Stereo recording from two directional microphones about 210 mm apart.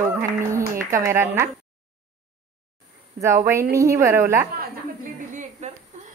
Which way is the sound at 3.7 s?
15° right (ahead or behind).